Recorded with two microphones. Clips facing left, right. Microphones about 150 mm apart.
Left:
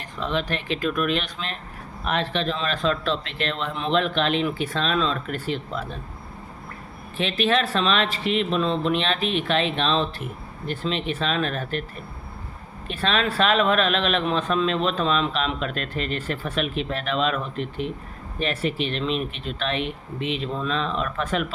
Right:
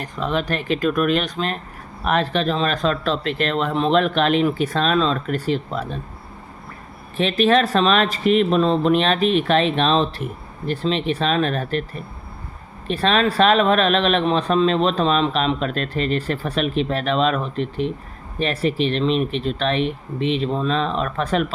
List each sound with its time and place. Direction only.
0.0 s speech: 45° right (ahead or behind)
7.2 s speech: 40° right (ahead or behind)
12.9 s speech: 35° right (ahead or behind)